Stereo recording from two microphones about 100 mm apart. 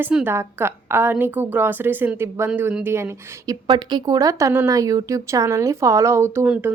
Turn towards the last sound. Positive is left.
turn(degrees=-20)  # may be behind; listen again after turning